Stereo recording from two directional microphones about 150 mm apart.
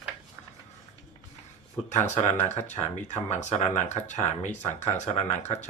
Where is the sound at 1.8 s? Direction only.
50° left (ahead or behind).